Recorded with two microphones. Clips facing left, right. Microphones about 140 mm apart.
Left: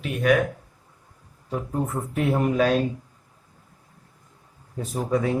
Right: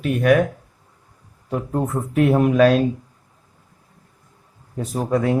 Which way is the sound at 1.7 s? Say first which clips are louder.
Right 5 dB; 90° right.